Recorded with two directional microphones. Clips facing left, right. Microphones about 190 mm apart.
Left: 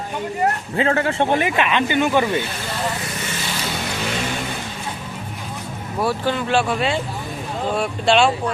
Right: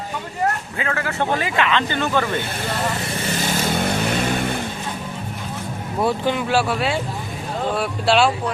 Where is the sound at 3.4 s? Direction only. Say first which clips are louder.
Right 7 dB; 45° right (ahead or behind).